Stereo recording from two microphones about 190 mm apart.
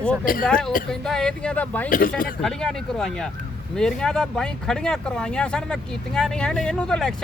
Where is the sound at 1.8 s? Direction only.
45° left (ahead or behind).